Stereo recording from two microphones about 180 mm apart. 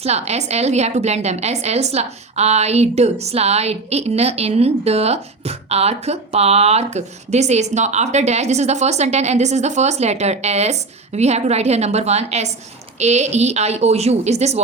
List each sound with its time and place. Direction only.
0.0 s a woman's voice: 35° right (ahead or behind)